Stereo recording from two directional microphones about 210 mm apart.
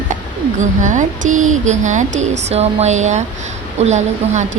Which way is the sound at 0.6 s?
35° right (ahead or behind).